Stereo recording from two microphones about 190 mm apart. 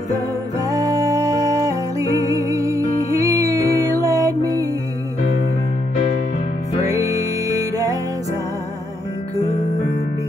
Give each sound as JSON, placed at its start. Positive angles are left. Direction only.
{"t": 0.7, "sound": "music", "side_deg": -20}
{"t": 6.9, "sound": "music", "side_deg": -15}